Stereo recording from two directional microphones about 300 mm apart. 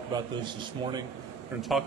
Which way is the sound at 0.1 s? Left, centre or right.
Centre.